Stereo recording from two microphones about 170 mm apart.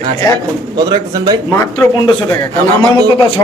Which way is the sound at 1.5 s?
15° left (ahead or behind).